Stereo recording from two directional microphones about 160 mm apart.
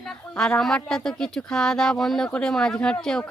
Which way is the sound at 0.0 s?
Centre (ahead or behind).